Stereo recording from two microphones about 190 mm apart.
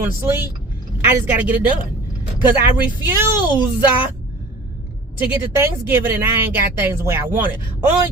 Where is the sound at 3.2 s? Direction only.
10° right (ahead or behind).